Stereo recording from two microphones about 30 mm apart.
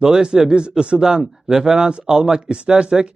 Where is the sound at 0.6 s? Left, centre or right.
Right.